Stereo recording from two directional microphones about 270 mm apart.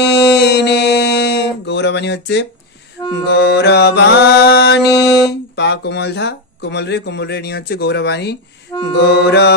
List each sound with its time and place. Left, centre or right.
0.0 s mantra: left
3.3 s speech: left